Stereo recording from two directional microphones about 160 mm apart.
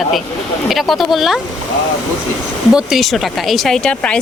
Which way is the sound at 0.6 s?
Centre (ahead or behind).